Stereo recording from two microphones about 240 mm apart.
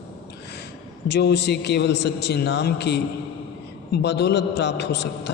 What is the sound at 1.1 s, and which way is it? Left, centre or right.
A man's voice, left.